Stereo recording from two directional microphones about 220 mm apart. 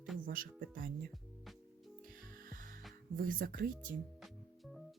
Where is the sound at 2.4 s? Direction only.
40° right (ahead or behind).